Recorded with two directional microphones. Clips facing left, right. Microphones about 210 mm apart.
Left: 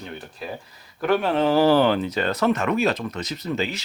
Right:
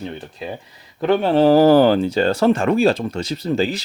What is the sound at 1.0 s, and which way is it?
Speech, 30° right (ahead or behind).